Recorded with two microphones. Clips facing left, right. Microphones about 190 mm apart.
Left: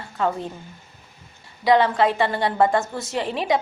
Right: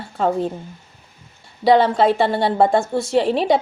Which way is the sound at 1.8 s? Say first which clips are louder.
Right 4 dB; 30° right (ahead or behind).